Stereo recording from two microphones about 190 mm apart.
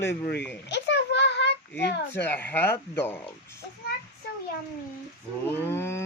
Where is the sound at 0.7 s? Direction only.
70° left (ahead or behind).